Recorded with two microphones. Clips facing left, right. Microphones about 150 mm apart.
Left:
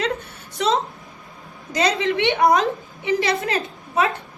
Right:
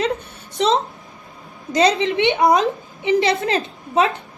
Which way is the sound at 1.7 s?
20° right (ahead or behind).